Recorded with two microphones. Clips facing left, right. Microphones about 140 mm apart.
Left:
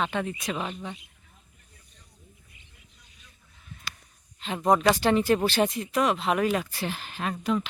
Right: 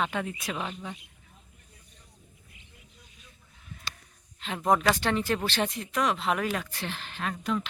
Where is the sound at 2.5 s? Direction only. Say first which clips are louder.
Right 2 dB; 90° right.